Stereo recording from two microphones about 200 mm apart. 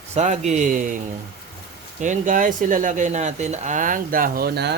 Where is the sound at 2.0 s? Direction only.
40° right (ahead or behind); by 4.8 s 55° right (ahead or behind).